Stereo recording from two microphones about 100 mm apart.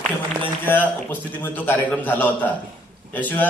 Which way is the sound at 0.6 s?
20° left (ahead or behind).